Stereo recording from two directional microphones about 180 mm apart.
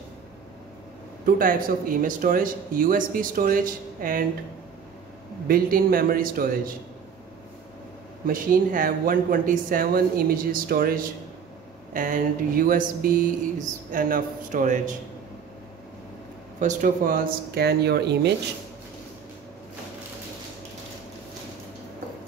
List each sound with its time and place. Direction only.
1.2 s speech: 50° right (ahead or behind)
5.5 s speech: 55° right (ahead or behind)
8.3 s speech: 50° right (ahead or behind)
16.5 s speech: 45° right (ahead or behind); by 18.3 s 65° right (ahead or behind)